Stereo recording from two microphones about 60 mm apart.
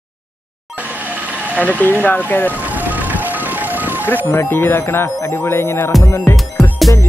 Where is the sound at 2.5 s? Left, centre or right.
Right.